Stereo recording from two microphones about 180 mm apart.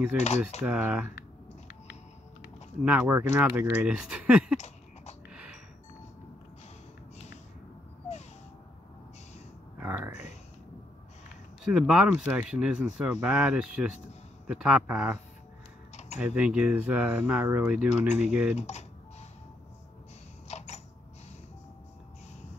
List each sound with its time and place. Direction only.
0.7 s speech: 10° right (ahead or behind)
2.8 s speech: 5° right (ahead or behind)
5.3 s music: 5° right (ahead or behind)
9.8 s a sound: 10° right (ahead or behind)
11.6 s speech: 5° right (ahead or behind)
16.2 s speech: 10° right (ahead or behind)
18.6 s speech: 40° left (ahead or behind)
20.4 s a sound: 40° left (ahead or behind)